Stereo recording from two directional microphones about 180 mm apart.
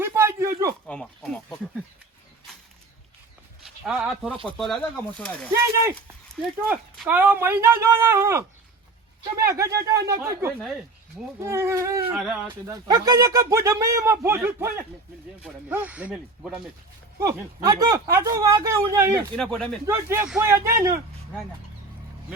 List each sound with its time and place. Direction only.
0.0 s a sound: 15° right (ahead or behind)
0.9 s speech: 5° left (ahead or behind)
3.6 s a sound: 5° right (ahead or behind)
4.4 s speech: centre (ahead or behind)
15.7 s speech: 10° right (ahead or behind)
17.2 s speech: 20° right (ahead or behind)
19.4 s speech: centre (ahead or behind)
19.8 s speech: 15° right (ahead or behind)